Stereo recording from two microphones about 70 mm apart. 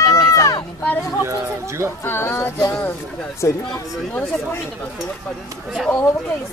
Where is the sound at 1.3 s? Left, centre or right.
Right.